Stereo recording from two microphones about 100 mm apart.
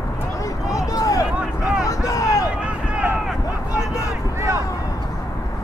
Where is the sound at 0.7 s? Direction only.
35° left (ahead or behind).